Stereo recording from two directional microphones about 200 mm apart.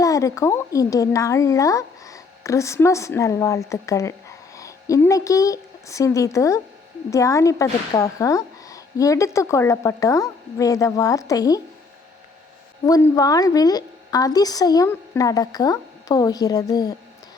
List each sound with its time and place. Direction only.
0.0 s a woman's voice: 15° left (ahead or behind)
12.8 s a woman's voice: 15° left (ahead or behind)